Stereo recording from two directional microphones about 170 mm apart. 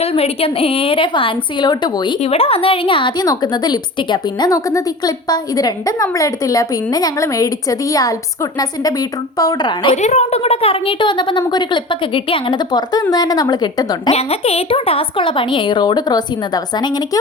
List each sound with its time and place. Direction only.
0.0 s a woman's voice: 35° left (ahead or behind)
9.9 s a woman's voice: 40° left (ahead or behind); by 14.1 s 25° left (ahead or behind)
14.1 s a woman's voice: 35° left (ahead or behind)